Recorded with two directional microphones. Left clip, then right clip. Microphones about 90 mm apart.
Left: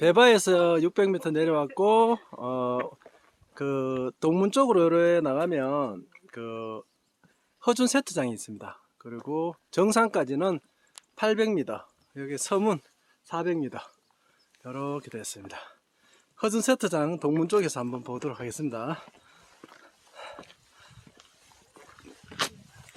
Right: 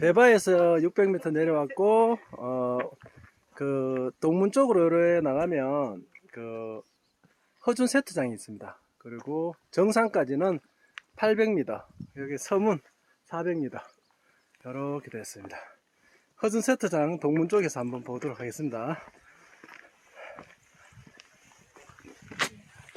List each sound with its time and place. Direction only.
0.0 s speech: 25° left (ahead or behind)
3.1 s a sound: 15° right (ahead or behind)
3.5 s speech: 20° left (ahead or behind); by 6.8 s 40° left (ahead or behind)
7.6 s speech: 30° left (ahead or behind)
8.6 s a sound: 30° left (ahead or behind)
9.1 s speech: 40° left (ahead or behind)
9.6 s speech: 25° left (ahead or behind)
10.1 s speech: 10° left (ahead or behind)
11.2 s speech: 10° right (ahead or behind)
13.2 s speech: 20° left (ahead or behind)
15.2 s speech: 10° left (ahead or behind)
22.4 s a sound: 30° right (ahead or behind)
22.9 s rowboat: centre (ahead or behind)